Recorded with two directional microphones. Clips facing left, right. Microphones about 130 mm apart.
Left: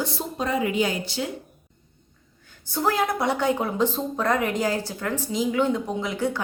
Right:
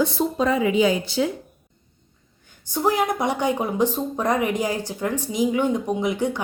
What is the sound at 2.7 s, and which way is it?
A woman's voice, 15° right (ahead or behind).